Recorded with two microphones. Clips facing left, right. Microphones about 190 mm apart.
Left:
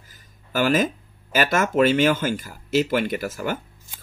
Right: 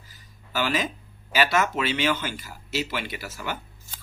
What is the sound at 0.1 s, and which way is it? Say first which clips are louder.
Speech: left 4 dB; 50° left (ahead or behind).